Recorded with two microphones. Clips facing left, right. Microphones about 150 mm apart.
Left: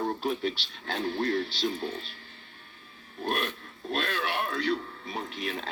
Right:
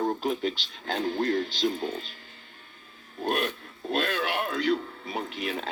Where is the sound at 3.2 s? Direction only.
40° right (ahead or behind).